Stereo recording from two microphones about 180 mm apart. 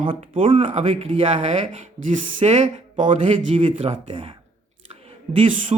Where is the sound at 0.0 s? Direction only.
30° right (ahead or behind).